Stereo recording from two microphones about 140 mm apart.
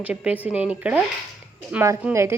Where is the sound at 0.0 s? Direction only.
10° right (ahead or behind).